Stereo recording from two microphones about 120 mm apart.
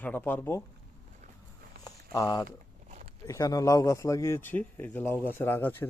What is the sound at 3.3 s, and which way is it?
A man's voice, 30° left (ahead or behind).